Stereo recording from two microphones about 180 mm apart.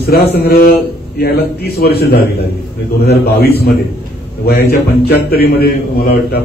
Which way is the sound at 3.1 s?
60° left (ahead or behind).